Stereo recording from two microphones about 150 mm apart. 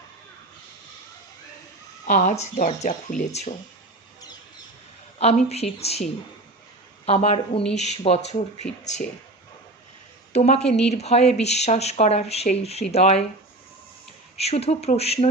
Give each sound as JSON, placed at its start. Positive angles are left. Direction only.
{"t": 2.0, "sound": "speech", "side_deg": 55}
{"t": 5.2, "sound": "speech", "side_deg": 45}
{"t": 10.3, "sound": "speech", "side_deg": 45}
{"t": 14.3, "sound": "speech", "side_deg": 45}